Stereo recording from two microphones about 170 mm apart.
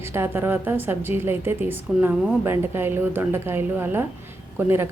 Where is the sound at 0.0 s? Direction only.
15° right (ahead or behind).